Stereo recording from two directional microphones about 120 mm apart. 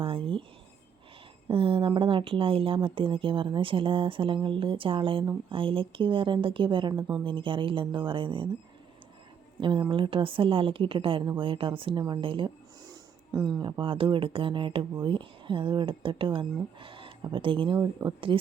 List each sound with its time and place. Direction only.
0.0 s a sound: 45° right (ahead or behind)
1.5 s speech: 45° right (ahead or behind)
9.6 s speech: 40° right (ahead or behind)
12.8 s speech: 35° right (ahead or behind)